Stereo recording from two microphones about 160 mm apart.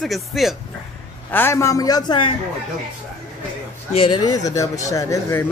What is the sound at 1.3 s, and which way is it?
Speech, 15° left (ahead or behind).